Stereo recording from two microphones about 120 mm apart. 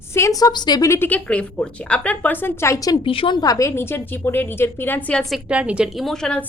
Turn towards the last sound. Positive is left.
turn(degrees=5)  # may be behind; listen again after turning